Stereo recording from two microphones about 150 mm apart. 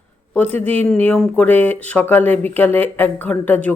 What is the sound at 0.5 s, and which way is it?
Speech, 10° left (ahead or behind).